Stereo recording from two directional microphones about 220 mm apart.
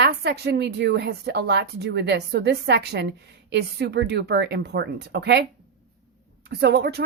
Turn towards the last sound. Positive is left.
turn(degrees=-50)  # may be behind; listen again after turning